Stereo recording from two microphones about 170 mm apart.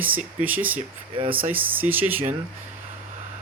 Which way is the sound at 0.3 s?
10° right (ahead or behind).